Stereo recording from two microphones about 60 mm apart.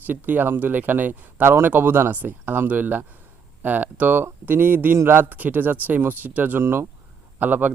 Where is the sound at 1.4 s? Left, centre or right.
Right.